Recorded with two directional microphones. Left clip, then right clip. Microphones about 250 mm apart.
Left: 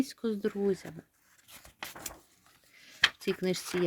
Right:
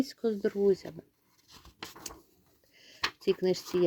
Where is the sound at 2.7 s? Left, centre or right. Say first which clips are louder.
Left 7 dB; centre.